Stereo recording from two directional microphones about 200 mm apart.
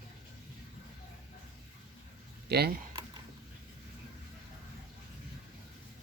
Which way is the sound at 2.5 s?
55° right (ahead or behind).